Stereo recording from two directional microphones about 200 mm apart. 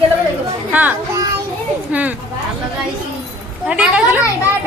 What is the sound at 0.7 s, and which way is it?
A woman's voice, 10° right (ahead or behind).